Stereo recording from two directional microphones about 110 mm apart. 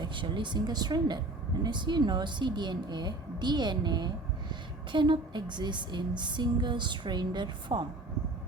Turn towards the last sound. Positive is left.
turn(degrees=-45)  # may be behind; listen again after turning